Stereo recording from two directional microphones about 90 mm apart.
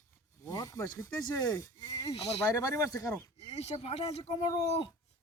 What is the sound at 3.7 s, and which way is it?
Speech, 50° left (ahead or behind).